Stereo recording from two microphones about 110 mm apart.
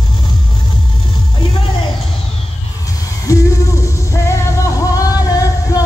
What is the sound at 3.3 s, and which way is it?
Music, 30° left (ahead or behind).